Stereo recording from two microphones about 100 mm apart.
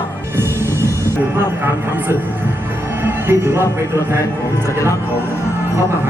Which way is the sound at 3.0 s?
25° right (ahead or behind).